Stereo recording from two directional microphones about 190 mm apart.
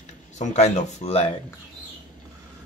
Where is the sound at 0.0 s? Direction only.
35° left (ahead or behind).